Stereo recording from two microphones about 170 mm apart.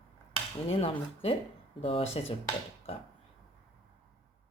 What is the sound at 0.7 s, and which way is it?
Speech, 35° left (ahead or behind).